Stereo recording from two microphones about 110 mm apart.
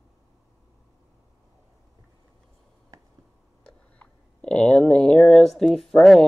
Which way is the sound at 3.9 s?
10° left (ahead or behind).